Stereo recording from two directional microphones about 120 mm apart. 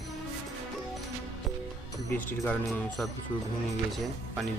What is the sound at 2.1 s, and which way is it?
Speech, 15° left (ahead or behind).